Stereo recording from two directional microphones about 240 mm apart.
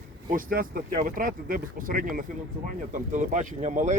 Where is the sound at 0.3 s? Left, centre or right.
Right.